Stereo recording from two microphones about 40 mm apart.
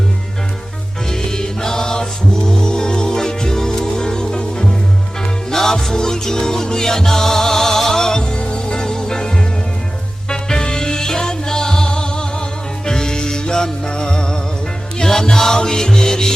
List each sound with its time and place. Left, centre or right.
1.1 s music: centre